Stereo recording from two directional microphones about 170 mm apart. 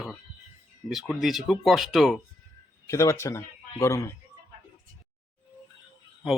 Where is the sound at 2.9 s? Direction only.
20° left (ahead or behind).